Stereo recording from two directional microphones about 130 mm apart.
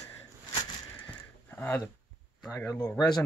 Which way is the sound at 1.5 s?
15° left (ahead or behind).